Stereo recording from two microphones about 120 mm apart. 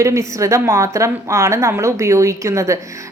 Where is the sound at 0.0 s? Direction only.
25° right (ahead or behind).